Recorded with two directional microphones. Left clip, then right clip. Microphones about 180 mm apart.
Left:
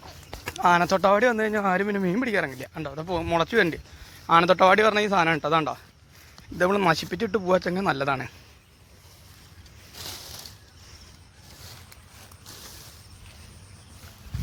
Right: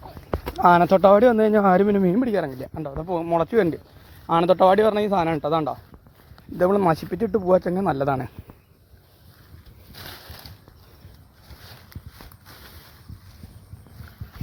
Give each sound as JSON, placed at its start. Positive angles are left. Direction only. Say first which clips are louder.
{"t": 0.5, "sound": "speech", "louder": "right 5 dB", "side_deg": -50}
{"t": 2.1, "sound": "speech", "louder": "right 2 dB", "side_deg": -20}
{"t": 2.7, "sound": "a man's voice", "louder": "right 4 dB", "side_deg": -5}
{"t": 6.6, "sound": "a man's voice", "louder": "right 2 dB", "side_deg": -15}
{"t": 8.0, "sound": "speech", "louder": "right 2 dB", "side_deg": -35}
{"t": 10.0, "sound": "a sound", "louder": "left 2 dB", "side_deg": 10}